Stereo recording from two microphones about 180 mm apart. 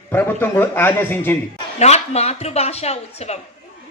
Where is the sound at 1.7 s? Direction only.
35° left (ahead or behind).